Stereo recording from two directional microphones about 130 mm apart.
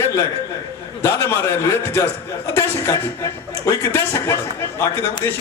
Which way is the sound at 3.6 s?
20° left (ahead or behind).